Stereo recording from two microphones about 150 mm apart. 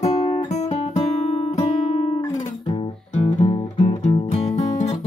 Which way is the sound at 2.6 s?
35° left (ahead or behind).